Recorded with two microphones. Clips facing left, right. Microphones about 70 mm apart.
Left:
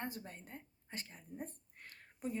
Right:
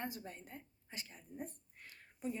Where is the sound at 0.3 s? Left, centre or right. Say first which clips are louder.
Right 1 dB; left.